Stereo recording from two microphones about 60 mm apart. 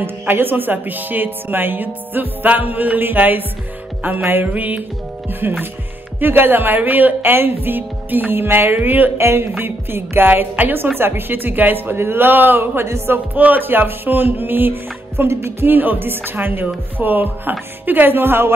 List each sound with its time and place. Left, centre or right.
0.0 s speech: right
4.5 s music: right
5.4 s speech: right
8.7 s music: right
9.2 s music: right
9.6 s speech: right
15.7 s speech: right